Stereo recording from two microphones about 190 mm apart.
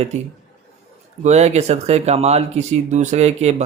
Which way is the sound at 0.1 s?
35° right (ahead or behind).